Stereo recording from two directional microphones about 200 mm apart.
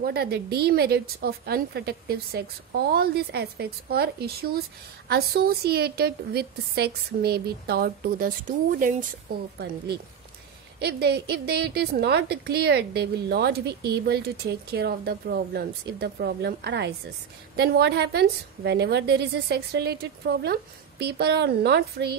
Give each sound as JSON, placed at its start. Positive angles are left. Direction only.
{"t": 0.0, "sound": "a woman's voice", "side_deg": -50}
{"t": 10.8, "sound": "a woman's voice", "side_deg": -55}
{"t": 21.0, "sound": "a woman's voice", "side_deg": -55}